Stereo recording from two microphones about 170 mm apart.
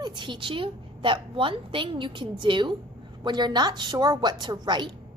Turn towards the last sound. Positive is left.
turn(degrees=-25)  # may be behind; listen again after turning